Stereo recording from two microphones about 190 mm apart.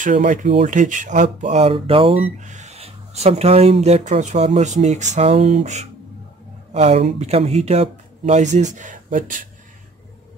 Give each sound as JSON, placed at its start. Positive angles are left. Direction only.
{"t": 0.0, "sound": "speech", "side_deg": -40}